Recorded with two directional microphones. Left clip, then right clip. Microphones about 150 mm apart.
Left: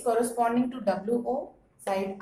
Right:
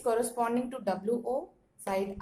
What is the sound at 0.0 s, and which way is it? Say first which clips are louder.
A woman's voice: left 4 dB; 65° right (ahead or behind).